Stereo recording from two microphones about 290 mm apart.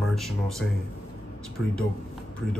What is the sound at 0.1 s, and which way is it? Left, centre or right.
Speech, centre.